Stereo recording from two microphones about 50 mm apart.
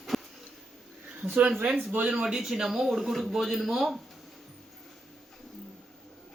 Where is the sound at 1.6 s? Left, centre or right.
Right.